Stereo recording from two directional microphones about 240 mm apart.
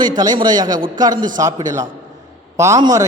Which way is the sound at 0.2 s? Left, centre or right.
Centre.